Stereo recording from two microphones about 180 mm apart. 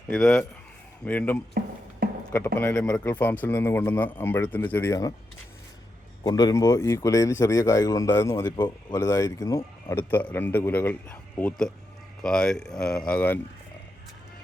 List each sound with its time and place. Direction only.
0.1 s a man's voice: 5° left (ahead or behind)
6.2 s a man's voice: 20° left (ahead or behind)